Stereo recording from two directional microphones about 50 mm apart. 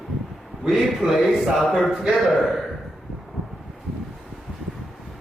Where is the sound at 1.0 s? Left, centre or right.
Centre.